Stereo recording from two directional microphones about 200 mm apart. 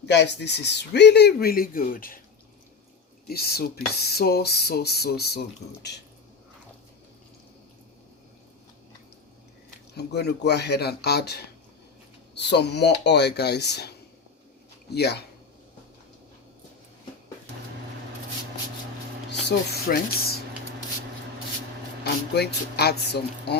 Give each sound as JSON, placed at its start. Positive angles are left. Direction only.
{"t": 0.0, "sound": "speech", "side_deg": 60}
{"t": 3.2, "sound": "speech", "side_deg": 50}
{"t": 10.0, "sound": "speech", "side_deg": 55}
{"t": 19.3, "sound": "a sound", "side_deg": 60}
{"t": 22.0, "sound": "speech", "side_deg": 55}